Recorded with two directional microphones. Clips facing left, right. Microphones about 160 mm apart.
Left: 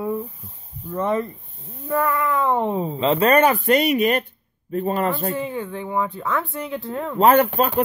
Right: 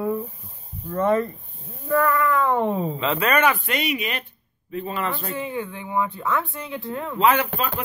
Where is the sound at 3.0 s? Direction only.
35° left (ahead or behind); by 7.7 s 50° left (ahead or behind).